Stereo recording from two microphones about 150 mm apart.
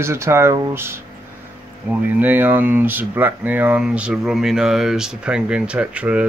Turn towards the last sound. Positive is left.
turn(degrees=-10)  # may be behind; listen again after turning